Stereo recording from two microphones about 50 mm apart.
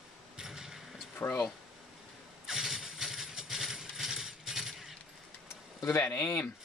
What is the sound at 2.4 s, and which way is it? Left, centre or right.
Vehicle, centre.